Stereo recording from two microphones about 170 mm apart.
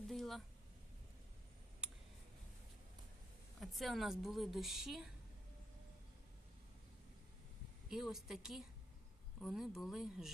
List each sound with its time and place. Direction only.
0.1 s a sound: centre (ahead or behind)
3.6 s a woman's voice: centre (ahead or behind)
7.9 s a woman's voice: centre (ahead or behind)